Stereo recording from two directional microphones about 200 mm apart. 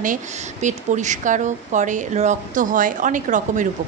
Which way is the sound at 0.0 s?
40° right (ahead or behind).